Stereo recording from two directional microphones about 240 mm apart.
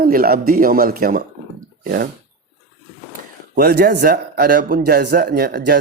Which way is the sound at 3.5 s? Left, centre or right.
Right.